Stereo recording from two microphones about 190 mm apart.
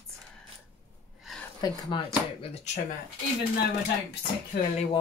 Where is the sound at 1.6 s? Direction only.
25° left (ahead or behind).